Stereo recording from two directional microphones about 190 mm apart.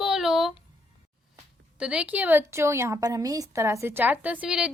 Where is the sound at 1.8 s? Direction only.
5° right (ahead or behind).